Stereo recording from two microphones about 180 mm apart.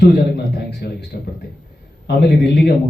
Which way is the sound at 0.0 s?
65° left (ahead or behind).